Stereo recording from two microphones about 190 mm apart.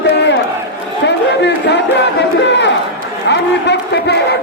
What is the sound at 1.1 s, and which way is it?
Crowd, 65° left (ahead or behind).